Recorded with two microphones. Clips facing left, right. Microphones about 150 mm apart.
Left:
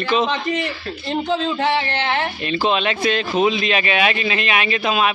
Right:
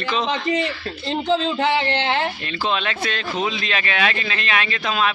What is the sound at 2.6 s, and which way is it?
A man's voice, 15° left (ahead or behind).